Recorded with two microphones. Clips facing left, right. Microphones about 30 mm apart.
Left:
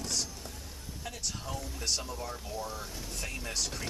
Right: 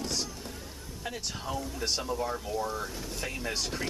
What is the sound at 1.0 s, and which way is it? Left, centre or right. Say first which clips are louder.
Speech: right 3 dB; centre.